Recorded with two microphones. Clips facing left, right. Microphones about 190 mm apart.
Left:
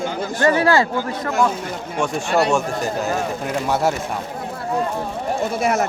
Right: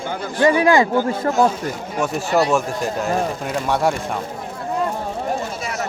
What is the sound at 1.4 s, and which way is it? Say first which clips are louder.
Speech: right 2 dB; 35° right (ahead or behind).